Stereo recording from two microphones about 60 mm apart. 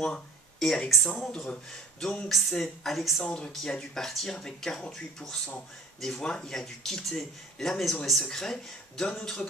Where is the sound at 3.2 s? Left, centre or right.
Centre.